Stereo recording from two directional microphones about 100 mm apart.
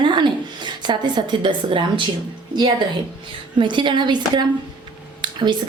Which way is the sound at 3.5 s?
50° right (ahead or behind).